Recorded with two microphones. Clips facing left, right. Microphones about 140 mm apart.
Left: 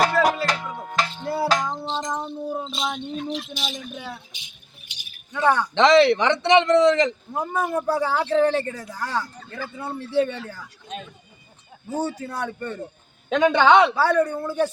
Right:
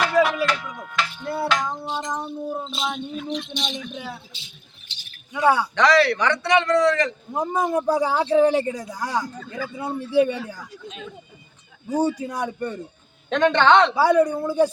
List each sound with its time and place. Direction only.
0.4 s music: 35° left (ahead or behind)
1.2 s music: 5° left (ahead or behind)
2.2 s speech: centre (ahead or behind)
4.3 s a sound: 15° left (ahead or behind)
5.3 s speech: 10° right (ahead or behind)
5.7 s speech: 25° left (ahead or behind)
7.3 s speech: 15° right (ahead or behind)
11.9 s speech: 15° right (ahead or behind)
13.3 s a man's voice: 5° left (ahead or behind)
13.9 s speech: 10° right (ahead or behind)